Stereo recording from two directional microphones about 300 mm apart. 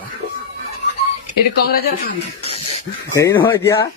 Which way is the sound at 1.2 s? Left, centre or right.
Left.